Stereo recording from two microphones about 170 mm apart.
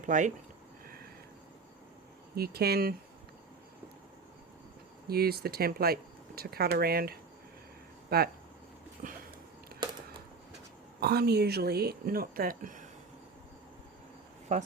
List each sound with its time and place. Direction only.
0.0 s speech: 45° right (ahead or behind)
2.3 s speech: 65° right (ahead or behind)
5.0 s speech: 65° right (ahead or behind)
9.0 s a sound: 60° right (ahead or behind)
11.0 s speech: 70° right (ahead or behind); by 12.9 s 50° right (ahead or behind)